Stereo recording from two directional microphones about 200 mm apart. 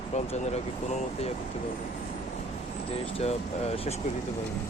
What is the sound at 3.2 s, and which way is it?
Speech, 30° left (ahead or behind).